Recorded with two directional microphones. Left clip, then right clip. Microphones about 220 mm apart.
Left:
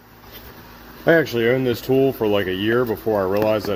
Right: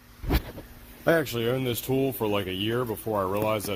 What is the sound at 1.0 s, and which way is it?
Speech, 15° right (ahead or behind).